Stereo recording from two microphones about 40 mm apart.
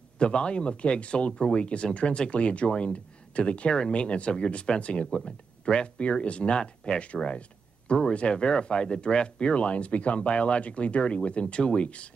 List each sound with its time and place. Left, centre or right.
0.2 s speech: left